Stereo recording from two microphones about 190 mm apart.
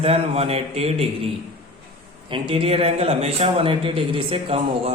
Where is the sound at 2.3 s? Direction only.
30° right (ahead or behind).